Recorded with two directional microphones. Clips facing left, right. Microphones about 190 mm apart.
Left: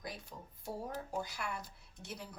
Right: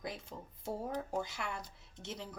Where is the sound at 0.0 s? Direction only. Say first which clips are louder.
Right 3 dB; 25° right (ahead or behind).